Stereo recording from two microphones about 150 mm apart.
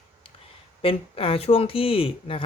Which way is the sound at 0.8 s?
40° left (ahead or behind).